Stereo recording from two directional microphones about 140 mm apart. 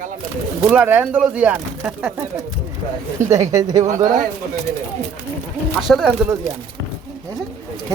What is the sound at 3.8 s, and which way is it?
Speech, 70° right (ahead or behind).